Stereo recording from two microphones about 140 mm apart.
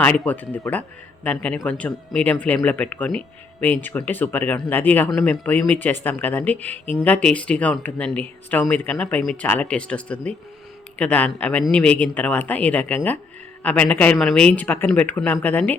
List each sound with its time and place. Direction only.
0.0 s speech: 10° left (ahead or behind)